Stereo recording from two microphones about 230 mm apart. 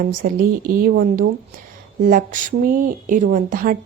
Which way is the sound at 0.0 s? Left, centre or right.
Right.